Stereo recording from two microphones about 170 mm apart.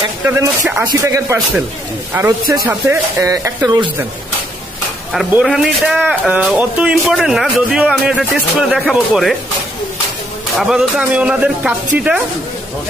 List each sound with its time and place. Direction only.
0.3 s speech: 10° right (ahead or behind)
5.1 s a man's voice: centre (ahead or behind)
10.6 s a man's voice: 5° right (ahead or behind)